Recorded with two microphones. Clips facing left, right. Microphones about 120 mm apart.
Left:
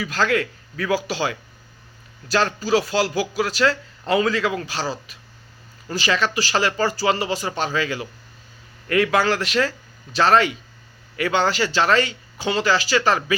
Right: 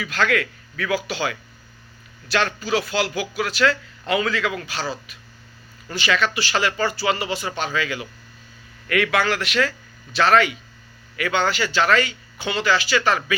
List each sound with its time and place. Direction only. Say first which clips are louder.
0.0 s a man's voice: left 1 dB; 30° left (ahead or behind)
9.1 s a man's voice: left 2 dB; 35° left (ahead or behind)